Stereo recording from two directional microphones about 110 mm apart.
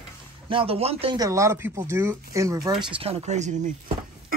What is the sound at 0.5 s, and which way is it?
Speech, 55° right (ahead or behind).